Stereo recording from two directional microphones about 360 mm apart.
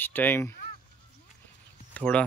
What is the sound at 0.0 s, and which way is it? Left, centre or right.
Speech, centre.